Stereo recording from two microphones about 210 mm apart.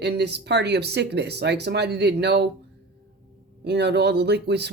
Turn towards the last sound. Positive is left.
turn(degrees=-55)  # may be behind; listen again after turning